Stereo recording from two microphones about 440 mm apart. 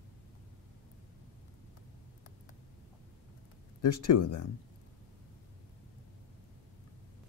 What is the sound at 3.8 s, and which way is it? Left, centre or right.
Speech, left.